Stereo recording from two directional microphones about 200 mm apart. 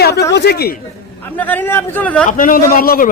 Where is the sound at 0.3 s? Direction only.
55° left (ahead or behind).